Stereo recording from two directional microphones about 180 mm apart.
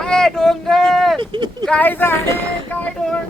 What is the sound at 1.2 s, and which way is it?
Speech, 25° right (ahead or behind).